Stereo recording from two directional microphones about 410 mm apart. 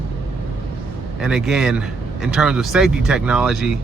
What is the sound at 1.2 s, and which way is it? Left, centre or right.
Speech, centre.